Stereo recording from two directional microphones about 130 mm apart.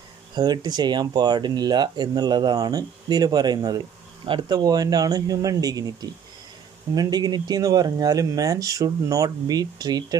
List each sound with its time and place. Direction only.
0.3 s speech: 30° right (ahead or behind)